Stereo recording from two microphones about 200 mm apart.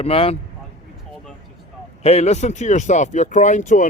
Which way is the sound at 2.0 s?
30° left (ahead or behind).